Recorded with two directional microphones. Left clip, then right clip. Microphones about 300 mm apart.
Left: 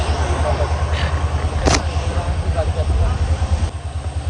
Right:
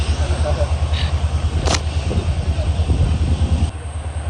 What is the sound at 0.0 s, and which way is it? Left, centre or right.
Vehicle, centre.